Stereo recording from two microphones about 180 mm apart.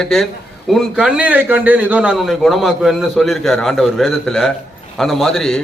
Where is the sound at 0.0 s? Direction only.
Centre (ahead or behind).